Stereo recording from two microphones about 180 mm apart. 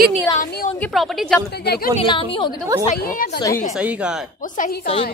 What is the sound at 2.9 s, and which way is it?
Speech, 55° left (ahead or behind).